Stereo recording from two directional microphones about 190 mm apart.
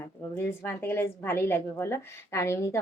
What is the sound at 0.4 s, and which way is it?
A woman's voice, 15° left (ahead or behind).